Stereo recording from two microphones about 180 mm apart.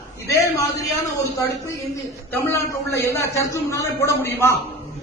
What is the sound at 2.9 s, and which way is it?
A man's voice, 15° left (ahead or behind).